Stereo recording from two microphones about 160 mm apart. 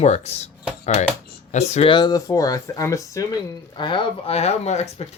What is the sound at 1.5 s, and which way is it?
Speech, 45° left (ahead or behind).